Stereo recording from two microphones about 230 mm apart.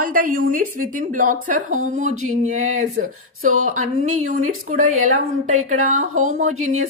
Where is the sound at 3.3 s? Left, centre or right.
Right.